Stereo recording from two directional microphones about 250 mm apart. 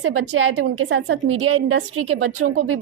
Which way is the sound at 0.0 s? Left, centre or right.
Right.